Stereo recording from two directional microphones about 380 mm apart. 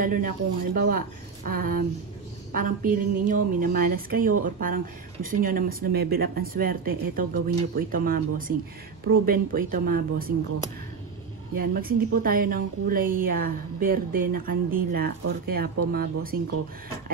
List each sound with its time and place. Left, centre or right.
0.0 s a woman's voice: right
11.5 s a woman's voice: right